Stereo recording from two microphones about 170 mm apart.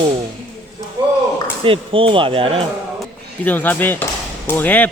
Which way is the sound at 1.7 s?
30° right (ahead or behind).